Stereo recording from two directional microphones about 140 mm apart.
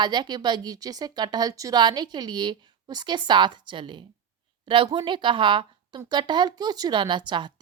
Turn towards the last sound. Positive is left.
turn(degrees=-35)  # may be behind; listen again after turning